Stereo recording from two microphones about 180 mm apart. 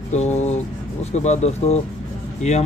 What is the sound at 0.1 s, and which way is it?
Speech, 40° left (ahead or behind).